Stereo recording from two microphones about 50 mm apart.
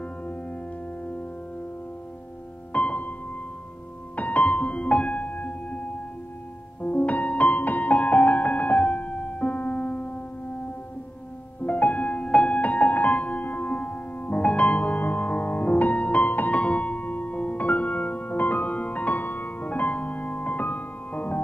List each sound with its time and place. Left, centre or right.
2.7 s music: left
6.8 s music: left
11.6 s music: left